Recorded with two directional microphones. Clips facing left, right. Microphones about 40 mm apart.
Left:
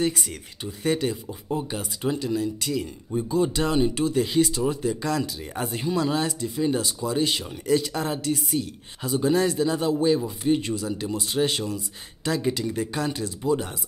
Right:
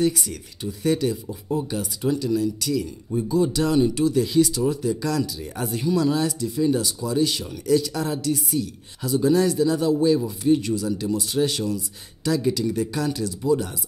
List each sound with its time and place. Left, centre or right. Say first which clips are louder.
0.0 s speech: right 3 dB; left
3.1 s speech: right 2 dB; left